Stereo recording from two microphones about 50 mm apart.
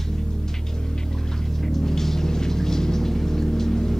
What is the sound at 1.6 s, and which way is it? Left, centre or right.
Music, centre.